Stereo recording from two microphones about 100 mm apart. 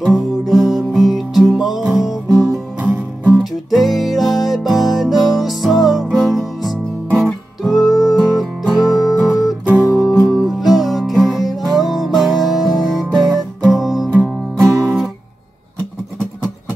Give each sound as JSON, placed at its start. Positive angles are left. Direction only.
{"t": 0.0, "sound": "music", "side_deg": 0}
{"t": 2.8, "sound": "music", "side_deg": -15}
{"t": 3.7, "sound": "music", "side_deg": 0}
{"t": 9.7, "sound": "music", "side_deg": -15}
{"t": 9.9, "sound": "music", "side_deg": -5}
{"t": 13.3, "sound": "guitar", "side_deg": 0}
{"t": 14.2, "sound": "music", "side_deg": -5}